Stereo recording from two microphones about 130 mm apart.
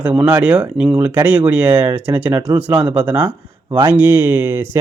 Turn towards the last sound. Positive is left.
turn(degrees=-15)  # may be behind; listen again after turning